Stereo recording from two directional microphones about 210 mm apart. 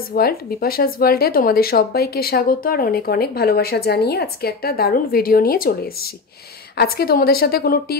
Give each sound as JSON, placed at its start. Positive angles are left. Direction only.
{"t": 0.1, "sound": "speech", "side_deg": 45}
{"t": 6.8, "sound": "speech", "side_deg": 45}